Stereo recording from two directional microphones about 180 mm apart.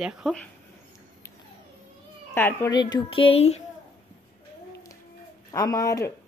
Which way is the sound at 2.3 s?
10° left (ahead or behind).